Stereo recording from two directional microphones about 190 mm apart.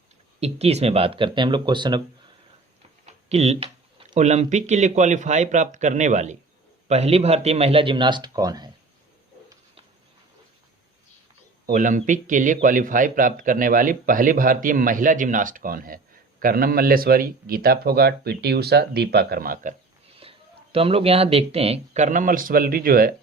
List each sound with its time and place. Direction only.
0.3 s a man's voice: 35° right (ahead or behind)
3.1 s a sound: 35° right (ahead or behind)
4.1 s a man's voice: 40° right (ahead or behind); by 8.7 s 20° right (ahead or behind)
11.6 s a man's voice: 45° right (ahead or behind)
20.2 s a sound: 30° right (ahead or behind)
20.7 s a man's voice: 30° right (ahead or behind); by 23.1 s 50° right (ahead or behind)